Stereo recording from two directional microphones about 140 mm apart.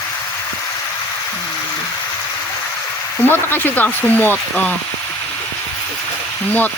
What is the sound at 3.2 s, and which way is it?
Speech, 15° left (ahead or behind).